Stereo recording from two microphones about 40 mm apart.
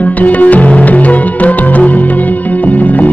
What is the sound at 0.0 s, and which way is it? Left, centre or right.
Music, left.